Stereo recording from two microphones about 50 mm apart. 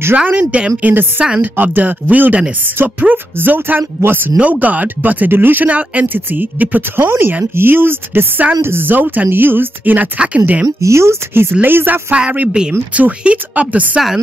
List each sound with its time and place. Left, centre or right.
0.1 s speech: right
0.8 s speech: right
4.4 s speech: right
9.3 s speech: right
10.8 s speech: right
11.6 s speech: right
12.1 s speech: right